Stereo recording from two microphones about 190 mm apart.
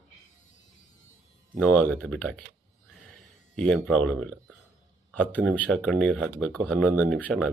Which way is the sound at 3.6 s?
5° left (ahead or behind).